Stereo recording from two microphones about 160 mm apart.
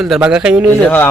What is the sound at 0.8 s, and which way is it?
Speech, 15° left (ahead or behind).